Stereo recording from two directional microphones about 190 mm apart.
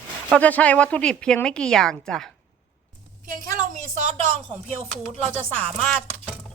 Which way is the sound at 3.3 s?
40° right (ahead or behind).